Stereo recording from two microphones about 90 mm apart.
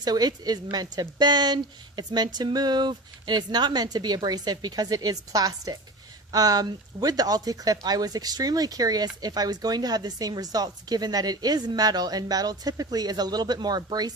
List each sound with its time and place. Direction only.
0.0 s speech: 50° right (ahead or behind)